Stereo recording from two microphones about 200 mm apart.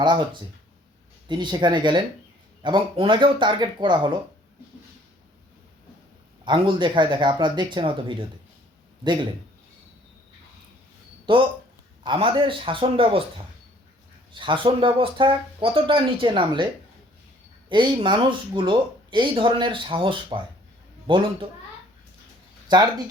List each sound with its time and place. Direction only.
1.3 s speech: 20° right (ahead or behind)
6.4 s speech: 25° right (ahead or behind)
11.3 s speech: 25° right (ahead or behind)
14.3 s speech: 25° right (ahead or behind)
17.7 s speech: 25° right (ahead or behind)
22.7 s speech: 20° right (ahead or behind)